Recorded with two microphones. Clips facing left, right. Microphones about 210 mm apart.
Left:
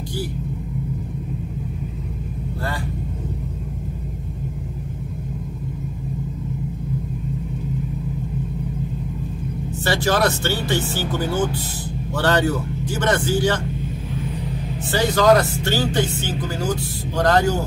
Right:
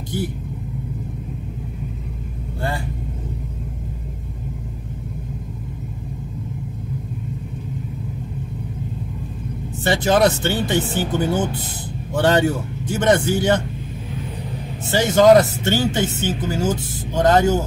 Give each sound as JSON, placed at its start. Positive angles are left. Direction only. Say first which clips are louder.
{"t": 9.8, "sound": "speech", "louder": "right 3 dB", "side_deg": -20}
{"t": 14.9, "sound": "speech", "louder": "right 3 dB", "side_deg": -20}